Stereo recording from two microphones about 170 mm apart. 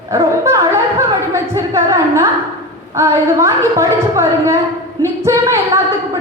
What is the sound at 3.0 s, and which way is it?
A woman's voice, 15° right (ahead or behind).